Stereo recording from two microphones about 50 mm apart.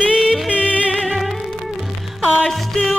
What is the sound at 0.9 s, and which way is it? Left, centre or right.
Music, centre.